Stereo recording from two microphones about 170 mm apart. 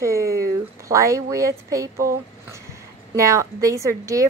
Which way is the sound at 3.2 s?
20° right (ahead or behind).